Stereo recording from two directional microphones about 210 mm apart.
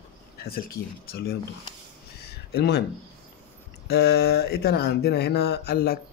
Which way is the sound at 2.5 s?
50° left (ahead or behind).